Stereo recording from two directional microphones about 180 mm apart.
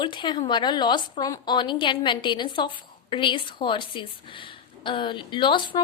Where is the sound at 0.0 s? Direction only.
25° left (ahead or behind).